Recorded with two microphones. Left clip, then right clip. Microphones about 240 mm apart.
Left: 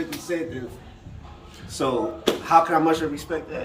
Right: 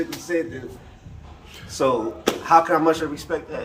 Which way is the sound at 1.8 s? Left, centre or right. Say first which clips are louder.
Right 3 dB; centre.